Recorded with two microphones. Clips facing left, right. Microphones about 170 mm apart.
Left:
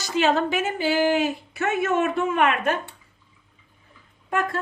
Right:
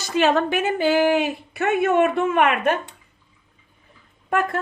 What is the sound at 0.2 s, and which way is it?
A woman's voice, 60° right (ahead or behind).